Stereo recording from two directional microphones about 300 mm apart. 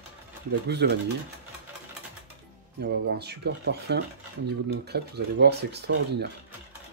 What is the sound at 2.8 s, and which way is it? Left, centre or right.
Speech, right.